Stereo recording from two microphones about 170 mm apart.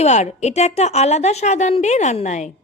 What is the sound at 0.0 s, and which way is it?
A woman's voice, 40° left (ahead or behind).